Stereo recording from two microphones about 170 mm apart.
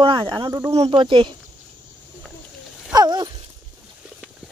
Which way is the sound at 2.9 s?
25° right (ahead or behind).